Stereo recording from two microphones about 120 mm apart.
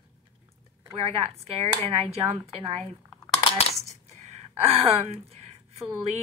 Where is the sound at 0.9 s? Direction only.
55° right (ahead or behind).